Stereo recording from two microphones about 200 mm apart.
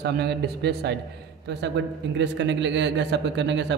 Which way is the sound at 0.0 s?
55° right (ahead or behind).